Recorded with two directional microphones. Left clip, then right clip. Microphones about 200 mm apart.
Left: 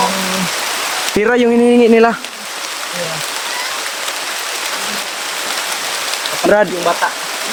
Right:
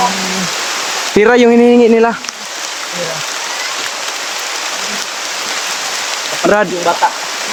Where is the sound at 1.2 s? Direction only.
25° right (ahead or behind).